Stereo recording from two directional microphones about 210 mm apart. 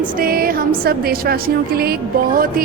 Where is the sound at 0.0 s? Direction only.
45° right (ahead or behind).